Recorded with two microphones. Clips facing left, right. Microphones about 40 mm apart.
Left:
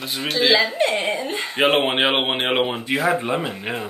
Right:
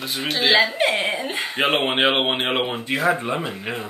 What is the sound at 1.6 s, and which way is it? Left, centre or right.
Speech, centre.